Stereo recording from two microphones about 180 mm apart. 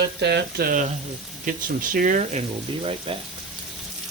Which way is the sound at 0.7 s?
45° right (ahead or behind).